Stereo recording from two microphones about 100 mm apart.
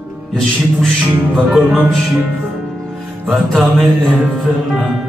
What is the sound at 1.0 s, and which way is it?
Music, 20° right (ahead or behind).